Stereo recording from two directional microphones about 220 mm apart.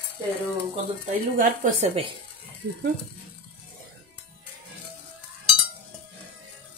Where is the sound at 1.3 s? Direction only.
35° right (ahead or behind).